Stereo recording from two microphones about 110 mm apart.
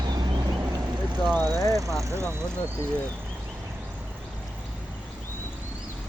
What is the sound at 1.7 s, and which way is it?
Speech, 30° right (ahead or behind).